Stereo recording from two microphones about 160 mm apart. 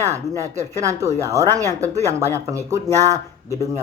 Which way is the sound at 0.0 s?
20° right (ahead or behind).